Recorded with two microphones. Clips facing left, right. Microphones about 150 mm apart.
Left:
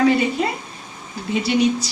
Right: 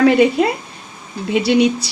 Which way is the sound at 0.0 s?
70° right (ahead or behind).